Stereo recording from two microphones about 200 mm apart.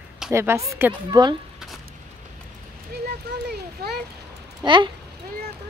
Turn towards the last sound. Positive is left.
turn(degrees=-25)  # may be behind; listen again after turning